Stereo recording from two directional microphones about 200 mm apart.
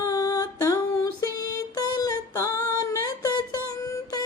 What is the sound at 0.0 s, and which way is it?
Female singing, 15° left (ahead or behind).